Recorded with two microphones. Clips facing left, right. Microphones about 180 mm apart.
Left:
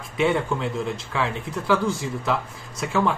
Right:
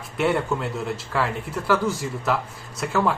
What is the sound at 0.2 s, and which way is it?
Speech, 5° right (ahead or behind).